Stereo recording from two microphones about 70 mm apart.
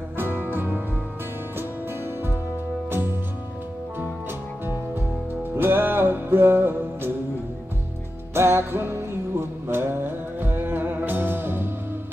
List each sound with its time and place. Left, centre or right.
0.2 s music: right
5.6 s music: right
8.4 s music: right